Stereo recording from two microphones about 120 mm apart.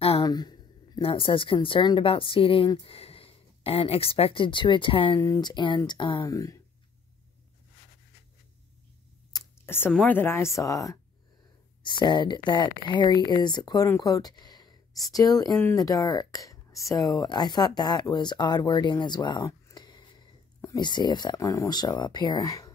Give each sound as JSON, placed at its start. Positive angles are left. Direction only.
{"t": 0.2, "sound": "a sound", "side_deg": 35}
{"t": 1.0, "sound": "speech", "side_deg": 50}
{"t": 5.2, "sound": "speech", "side_deg": 25}
{"t": 5.5, "sound": "speech", "side_deg": 40}
{"t": 6.2, "sound": "speech", "side_deg": 30}
{"t": 9.7, "sound": "speech", "side_deg": 15}
{"t": 11.8, "sound": "speech", "side_deg": 40}
{"t": 19.7, "sound": "a sound", "side_deg": 35}
{"t": 20.6, "sound": "speech", "side_deg": 35}